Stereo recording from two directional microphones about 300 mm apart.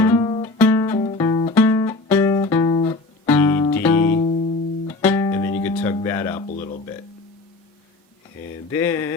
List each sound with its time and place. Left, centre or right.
0.0 s music: centre
6.5 s speech: left
8.7 s a sound: centre